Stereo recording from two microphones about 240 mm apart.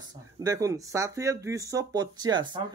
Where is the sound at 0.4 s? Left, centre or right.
Centre.